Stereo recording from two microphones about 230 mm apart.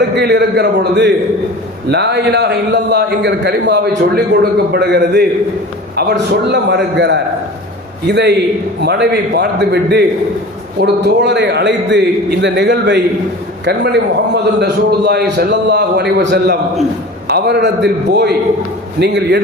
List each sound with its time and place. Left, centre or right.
0.2 s a man's voice: right